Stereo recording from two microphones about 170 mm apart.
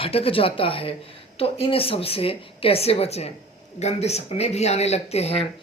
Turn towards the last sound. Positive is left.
turn(degrees=35)  # may be behind; listen again after turning